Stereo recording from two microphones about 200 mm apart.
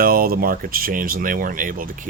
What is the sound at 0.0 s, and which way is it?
Speech, 45° right (ahead or behind).